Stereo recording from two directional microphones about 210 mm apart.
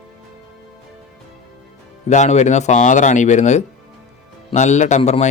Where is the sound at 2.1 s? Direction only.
35° left (ahead or behind).